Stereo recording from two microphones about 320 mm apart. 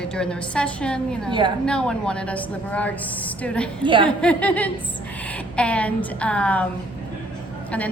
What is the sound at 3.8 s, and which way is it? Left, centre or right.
Speech, centre.